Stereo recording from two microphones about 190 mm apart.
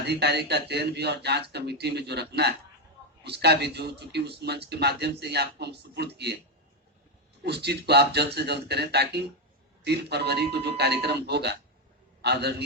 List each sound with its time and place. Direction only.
0.0 s a man's voice: 60° right (ahead or behind)
7.4 s a man's voice: 60° right (ahead or behind)